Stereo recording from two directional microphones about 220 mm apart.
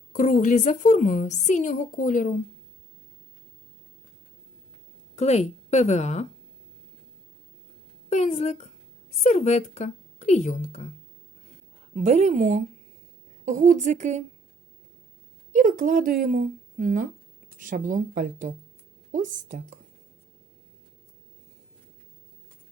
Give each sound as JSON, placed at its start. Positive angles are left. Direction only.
{"t": 0.1, "sound": "a woman's voice", "side_deg": 35}
{"t": 5.1, "sound": "a woman's voice", "side_deg": 30}
{"t": 8.1, "sound": "a woman's voice", "side_deg": 35}
{"t": 11.9, "sound": "a woman's voice", "side_deg": -30}
{"t": 15.5, "sound": "a woman's voice", "side_deg": -35}